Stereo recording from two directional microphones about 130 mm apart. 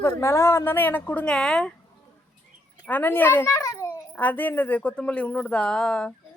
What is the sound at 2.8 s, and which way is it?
A child's voice, 15° left (ahead or behind).